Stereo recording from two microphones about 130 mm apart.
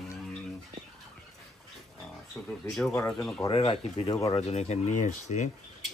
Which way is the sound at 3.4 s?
50° left (ahead or behind).